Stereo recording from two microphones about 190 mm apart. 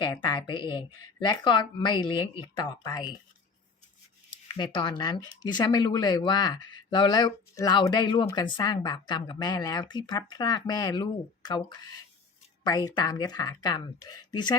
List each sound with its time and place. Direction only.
0.0 s speech: 25° left (ahead or behind)
4.3 s speech: 25° left (ahead or behind)